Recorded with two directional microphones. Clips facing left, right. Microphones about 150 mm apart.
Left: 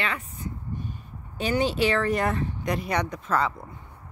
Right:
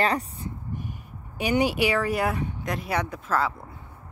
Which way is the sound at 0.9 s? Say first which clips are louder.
Even; 15° right (ahead or behind).